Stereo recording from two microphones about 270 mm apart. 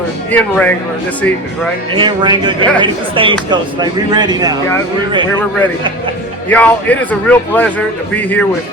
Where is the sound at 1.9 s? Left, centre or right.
Centre.